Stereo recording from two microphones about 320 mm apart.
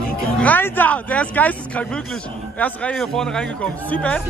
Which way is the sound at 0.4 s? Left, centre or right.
Centre.